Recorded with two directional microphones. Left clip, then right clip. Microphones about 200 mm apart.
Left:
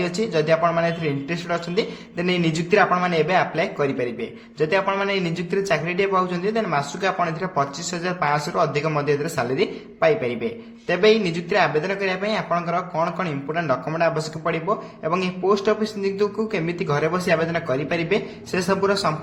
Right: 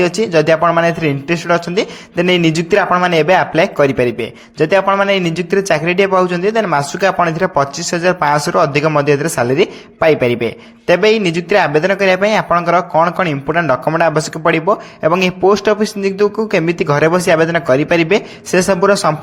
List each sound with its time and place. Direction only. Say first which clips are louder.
0.0 s speech: right 10 dB; 40° right (ahead or behind)